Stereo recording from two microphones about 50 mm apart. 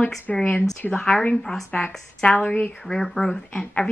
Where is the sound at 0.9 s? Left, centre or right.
Left.